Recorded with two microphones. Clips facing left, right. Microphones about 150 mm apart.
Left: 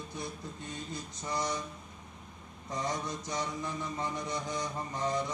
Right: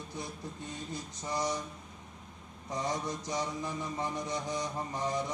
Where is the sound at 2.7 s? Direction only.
20° right (ahead or behind).